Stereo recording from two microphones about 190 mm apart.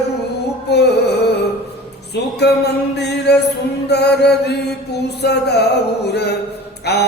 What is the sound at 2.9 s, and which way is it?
Music, 60° left (ahead or behind).